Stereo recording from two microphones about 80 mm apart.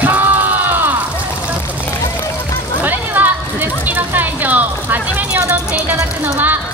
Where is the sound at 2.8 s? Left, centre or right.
Right.